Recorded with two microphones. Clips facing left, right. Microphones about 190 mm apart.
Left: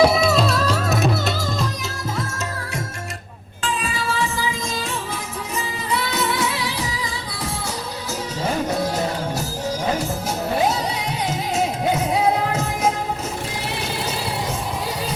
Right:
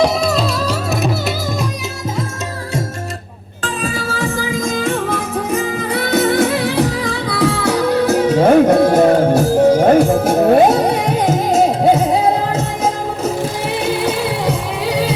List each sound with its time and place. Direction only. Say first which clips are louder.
0.0 s music: right 1 dB; centre (ahead or behind)
3.6 s music: right 4 dB; 45° right (ahead or behind)
13.7 s music: right 10 dB; 55° right (ahead or behind); by 15.1 s 70° right (ahead or behind)